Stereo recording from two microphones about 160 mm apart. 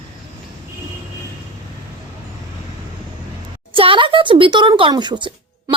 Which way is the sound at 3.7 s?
35° right (ahead or behind).